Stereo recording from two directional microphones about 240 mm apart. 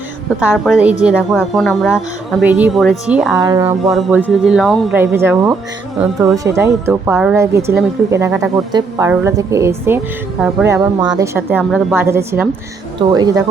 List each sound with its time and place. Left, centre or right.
0.4 s a woman's voice: centre
3.3 s a woman's voice: centre
4.2 s a woman's voice: centre
4.9 s a woman's voice: centre